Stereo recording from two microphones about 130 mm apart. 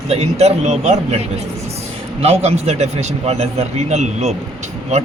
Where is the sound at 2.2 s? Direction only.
55° right (ahead or behind).